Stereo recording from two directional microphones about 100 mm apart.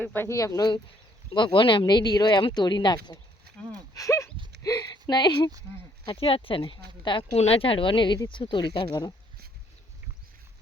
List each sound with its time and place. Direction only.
0.0 s speech: 20° left (ahead or behind)
0.3 s speech: 35° left (ahead or behind)
1.3 s speech: 55° left (ahead or behind)
3.9 s speech: 30° left (ahead or behind)
6.1 s speech: 70° left (ahead or behind)
7.3 s speech: 80° left; by 9.1 s 45° left (ahead or behind)